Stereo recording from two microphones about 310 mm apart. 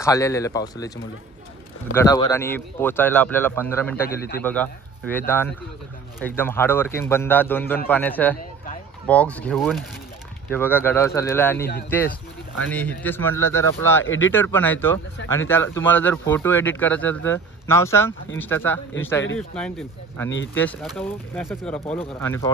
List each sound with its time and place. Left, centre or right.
0.0 s speech: centre
2.0 s speech: centre
14.0 s speech: left
14.3 s speech: centre